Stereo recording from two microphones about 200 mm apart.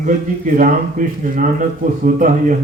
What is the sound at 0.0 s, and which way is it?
Speech, 40° right (ahead or behind).